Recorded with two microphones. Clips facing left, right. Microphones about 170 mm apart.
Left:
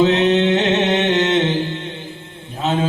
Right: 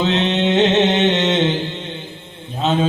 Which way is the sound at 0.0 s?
20° right (ahead or behind).